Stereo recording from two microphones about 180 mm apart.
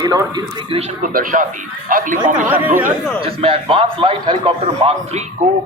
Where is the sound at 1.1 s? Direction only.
50° right (ahead or behind).